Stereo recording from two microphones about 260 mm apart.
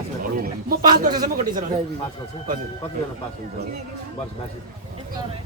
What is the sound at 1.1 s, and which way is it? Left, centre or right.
Speech, centre.